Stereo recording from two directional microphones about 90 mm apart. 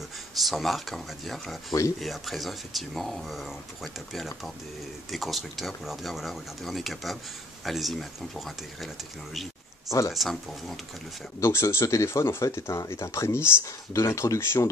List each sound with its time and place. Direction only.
0.4 s speech: centre (ahead or behind)
9.8 s speech: 35° left (ahead or behind)
10.1 s speech: centre (ahead or behind)
11.4 s speech: 30° left (ahead or behind)